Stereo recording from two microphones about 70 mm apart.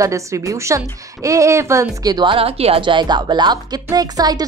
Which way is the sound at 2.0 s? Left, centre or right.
Right.